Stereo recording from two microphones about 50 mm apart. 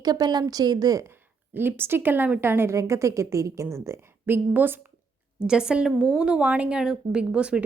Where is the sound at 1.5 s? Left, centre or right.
Right.